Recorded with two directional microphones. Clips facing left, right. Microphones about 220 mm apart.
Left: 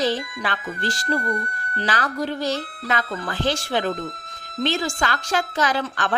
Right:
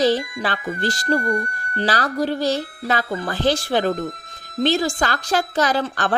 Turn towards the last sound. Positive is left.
turn(degrees=-35)  # may be behind; listen again after turning